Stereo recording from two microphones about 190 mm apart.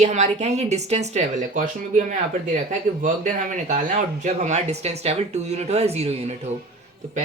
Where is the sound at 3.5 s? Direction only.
40° right (ahead or behind).